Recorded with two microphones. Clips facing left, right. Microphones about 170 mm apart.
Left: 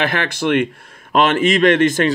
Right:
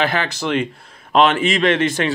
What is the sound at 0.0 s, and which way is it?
Speech, 50° left (ahead or behind).